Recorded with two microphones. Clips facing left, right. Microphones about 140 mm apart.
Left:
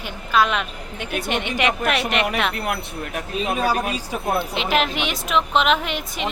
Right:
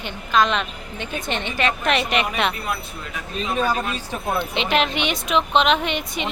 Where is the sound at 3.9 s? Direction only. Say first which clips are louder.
Left 2 dB; 5° left (ahead or behind).